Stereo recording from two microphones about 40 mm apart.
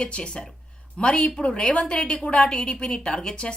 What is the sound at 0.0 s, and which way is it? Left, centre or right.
Speech, left.